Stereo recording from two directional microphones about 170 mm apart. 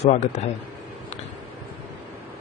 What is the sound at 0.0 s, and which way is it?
Speech, 40° left (ahead or behind).